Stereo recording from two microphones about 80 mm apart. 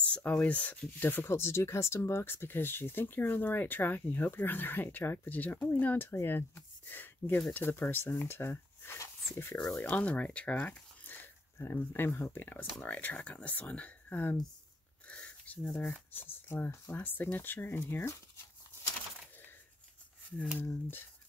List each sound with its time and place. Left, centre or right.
0.1 s speech: centre; by 9.7 s left
9.7 s speech: centre
15.0 s a sound: centre
16.1 s speech: left
20.5 s speech: left